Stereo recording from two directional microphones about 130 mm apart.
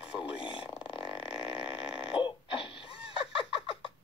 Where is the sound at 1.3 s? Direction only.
45° left (ahead or behind).